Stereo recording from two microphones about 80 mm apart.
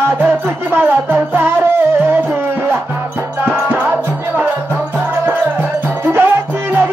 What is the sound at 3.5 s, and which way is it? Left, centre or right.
Music, centre.